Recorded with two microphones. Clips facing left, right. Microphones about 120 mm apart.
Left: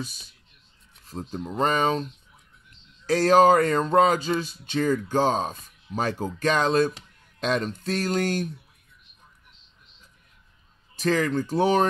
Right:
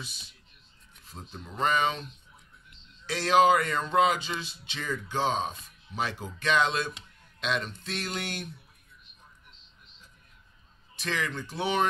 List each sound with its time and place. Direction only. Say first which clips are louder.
0.0 s speech: left 9 dB; 45° left (ahead or behind)
3.1 s speech: left 5 dB; 40° left (ahead or behind)
11.0 s speech: left 10 dB; 40° left (ahead or behind)